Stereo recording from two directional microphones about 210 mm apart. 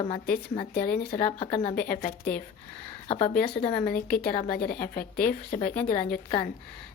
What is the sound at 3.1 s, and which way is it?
Speech, 25° left (ahead or behind).